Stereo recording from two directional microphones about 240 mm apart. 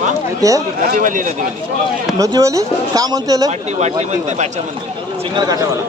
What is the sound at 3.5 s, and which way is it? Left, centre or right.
Speech, right.